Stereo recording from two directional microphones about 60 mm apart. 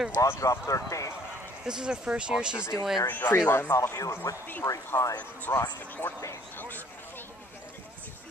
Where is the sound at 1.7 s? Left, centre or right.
Centre.